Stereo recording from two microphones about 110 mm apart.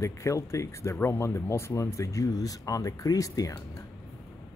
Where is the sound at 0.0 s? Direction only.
25° left (ahead or behind).